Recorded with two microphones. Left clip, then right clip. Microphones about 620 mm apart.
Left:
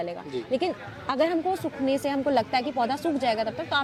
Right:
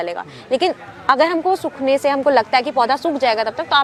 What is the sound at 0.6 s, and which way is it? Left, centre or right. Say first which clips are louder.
Speech: right 10 dB; right.